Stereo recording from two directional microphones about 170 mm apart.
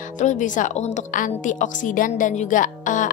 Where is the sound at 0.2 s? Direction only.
45° left (ahead or behind).